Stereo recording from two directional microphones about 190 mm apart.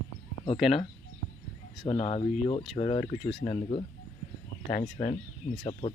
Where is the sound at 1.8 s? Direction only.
30° left (ahead or behind).